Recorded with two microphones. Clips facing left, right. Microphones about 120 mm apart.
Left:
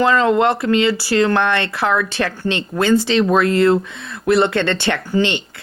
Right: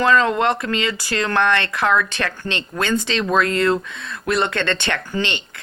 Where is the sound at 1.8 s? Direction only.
30° left (ahead or behind).